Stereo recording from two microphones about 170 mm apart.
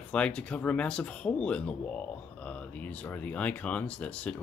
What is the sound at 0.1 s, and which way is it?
Speech, 5° left (ahead or behind).